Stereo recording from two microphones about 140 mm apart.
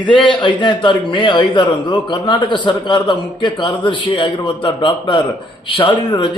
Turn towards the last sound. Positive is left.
turn(degrees=35)  # may be behind; listen again after turning